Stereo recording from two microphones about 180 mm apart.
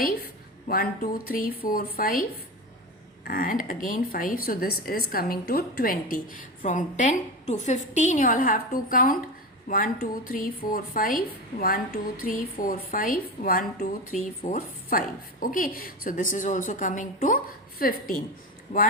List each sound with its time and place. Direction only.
0.7 s a woman's voice: 55° left (ahead or behind)
3.2 s a woman's voice: 50° left (ahead or behind)
18.7 s speech: 40° left (ahead or behind)